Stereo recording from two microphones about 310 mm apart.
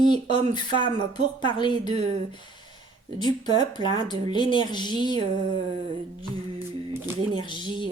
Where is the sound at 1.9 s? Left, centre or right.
Right.